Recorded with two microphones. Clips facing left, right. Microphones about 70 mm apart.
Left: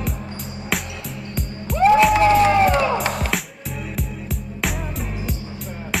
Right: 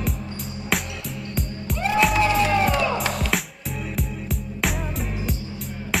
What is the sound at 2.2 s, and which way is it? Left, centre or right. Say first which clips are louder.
Music: left 6 dB; left.